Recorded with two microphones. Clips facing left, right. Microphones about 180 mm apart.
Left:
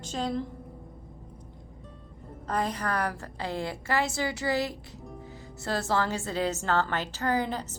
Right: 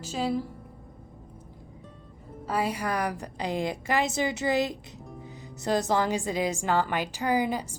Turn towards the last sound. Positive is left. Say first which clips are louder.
# right 2 dB
turn(degrees=-10)  # may be behind; listen again after turning